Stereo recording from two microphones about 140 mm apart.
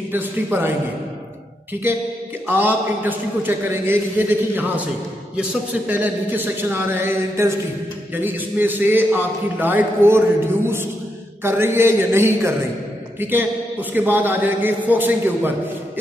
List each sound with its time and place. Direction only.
0.1 s a man's voice: 15° right (ahead or behind)
2.4 s a man's voice: 15° right (ahead or behind)
11.4 s a man's voice: 15° right (ahead or behind)